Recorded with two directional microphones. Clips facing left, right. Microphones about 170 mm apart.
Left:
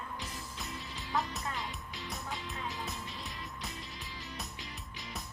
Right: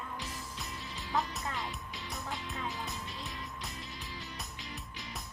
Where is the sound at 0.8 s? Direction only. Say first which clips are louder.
Right 1 dB; centre (ahead or behind).